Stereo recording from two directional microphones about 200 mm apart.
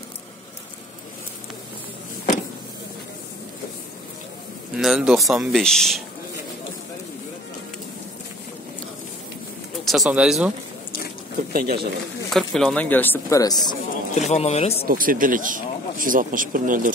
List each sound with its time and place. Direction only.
4.7 s speech: 5° right (ahead or behind)
9.8 s speech: centre (ahead or behind)
11.5 s speech: 50° right (ahead or behind)
12.3 s speech: centre (ahead or behind); by 13.7 s 20° left (ahead or behind)
14.1 s speech: 35° left (ahead or behind)
14.9 s speech: 45° right (ahead or behind)